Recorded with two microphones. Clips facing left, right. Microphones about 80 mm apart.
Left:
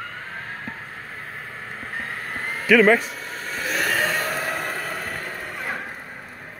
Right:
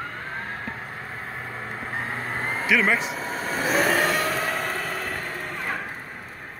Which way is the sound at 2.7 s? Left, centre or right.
Left.